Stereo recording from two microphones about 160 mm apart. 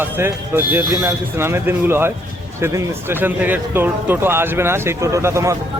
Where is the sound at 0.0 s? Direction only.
15° right (ahead or behind).